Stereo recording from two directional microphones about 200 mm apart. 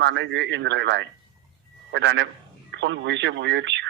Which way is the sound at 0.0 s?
65° right (ahead or behind).